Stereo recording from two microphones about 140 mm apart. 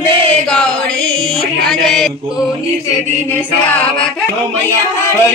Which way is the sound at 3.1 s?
15° left (ahead or behind).